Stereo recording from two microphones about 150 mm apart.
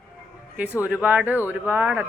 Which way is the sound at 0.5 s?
10° right (ahead or behind).